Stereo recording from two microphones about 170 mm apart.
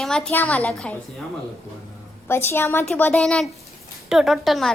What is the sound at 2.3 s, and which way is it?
A woman's voice, 15° left (ahead or behind).